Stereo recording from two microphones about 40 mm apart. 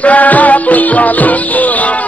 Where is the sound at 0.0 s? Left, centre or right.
Left.